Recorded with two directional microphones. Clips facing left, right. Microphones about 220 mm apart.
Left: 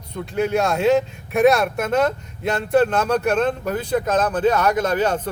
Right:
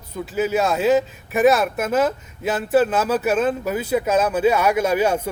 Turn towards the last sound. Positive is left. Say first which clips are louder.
# right 1 dB
turn(degrees=-10)  # may be behind; listen again after turning